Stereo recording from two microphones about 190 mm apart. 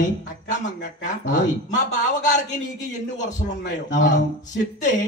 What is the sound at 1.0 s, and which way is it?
A man's voice, 40° left (ahead or behind).